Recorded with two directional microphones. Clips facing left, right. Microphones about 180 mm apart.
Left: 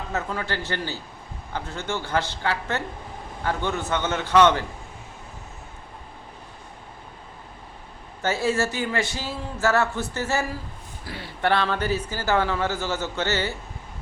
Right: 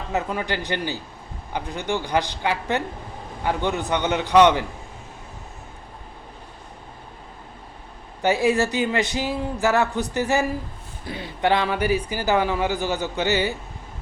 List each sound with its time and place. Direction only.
0.1 s speech: 15° right (ahead or behind)
8.2 s speech: 15° right (ahead or behind)